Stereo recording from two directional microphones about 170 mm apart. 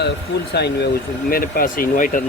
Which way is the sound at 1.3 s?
55° left (ahead or behind).